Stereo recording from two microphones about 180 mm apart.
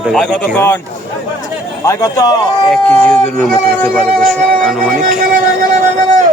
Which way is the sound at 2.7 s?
5° left (ahead or behind).